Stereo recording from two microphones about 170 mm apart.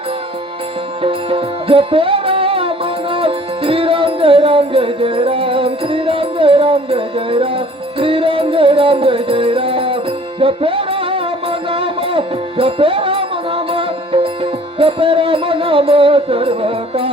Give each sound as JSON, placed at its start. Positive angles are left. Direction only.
{"t": 1.0, "sound": "music", "side_deg": -30}